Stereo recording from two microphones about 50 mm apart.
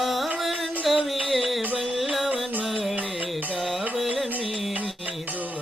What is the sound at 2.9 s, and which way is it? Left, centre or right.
Music, right.